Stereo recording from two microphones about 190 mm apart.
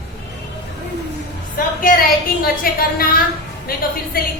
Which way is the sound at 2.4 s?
50° left (ahead or behind).